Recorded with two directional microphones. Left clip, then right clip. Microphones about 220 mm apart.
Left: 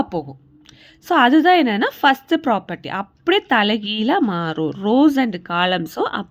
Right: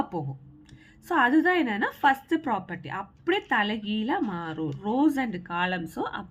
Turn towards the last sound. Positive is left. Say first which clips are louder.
# left 10 dB
turn(degrees=45)  # may be behind; listen again after turning